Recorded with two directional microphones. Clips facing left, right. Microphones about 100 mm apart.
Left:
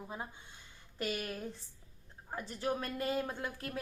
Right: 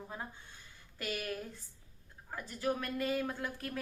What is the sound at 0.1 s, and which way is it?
Speech, 15° left (ahead or behind).